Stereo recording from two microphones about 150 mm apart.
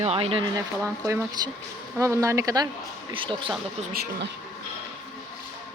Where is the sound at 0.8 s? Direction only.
20° right (ahead or behind).